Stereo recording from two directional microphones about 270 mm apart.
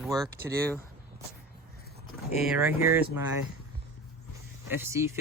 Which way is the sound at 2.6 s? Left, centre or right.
Centre.